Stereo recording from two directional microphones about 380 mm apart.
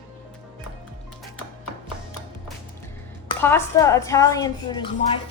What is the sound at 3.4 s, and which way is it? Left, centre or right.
A woman's voice, centre.